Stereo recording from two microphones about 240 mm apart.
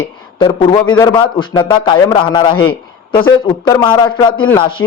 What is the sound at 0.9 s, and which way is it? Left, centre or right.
A man's voice, centre.